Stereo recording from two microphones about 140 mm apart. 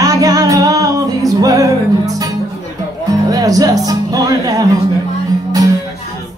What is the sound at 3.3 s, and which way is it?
Music, 25° right (ahead or behind).